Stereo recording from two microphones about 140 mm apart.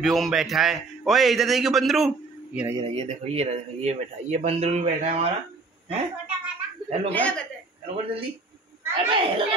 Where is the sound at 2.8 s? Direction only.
45° right (ahead or behind).